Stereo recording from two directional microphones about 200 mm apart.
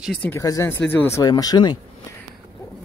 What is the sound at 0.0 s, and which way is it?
Speech, 5° left (ahead or behind).